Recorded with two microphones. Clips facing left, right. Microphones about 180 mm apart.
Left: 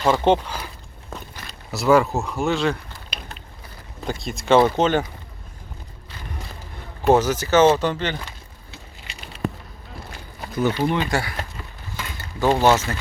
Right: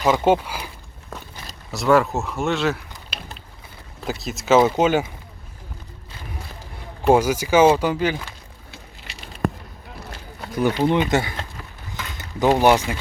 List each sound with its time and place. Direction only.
0.0 s speech: 10° right (ahead or behind)
1.7 s speech: centre (ahead or behind)
4.0 s speech: 5° right (ahead or behind)
7.0 s speech: 10° right (ahead or behind)
10.5 s speech: 15° right (ahead or behind)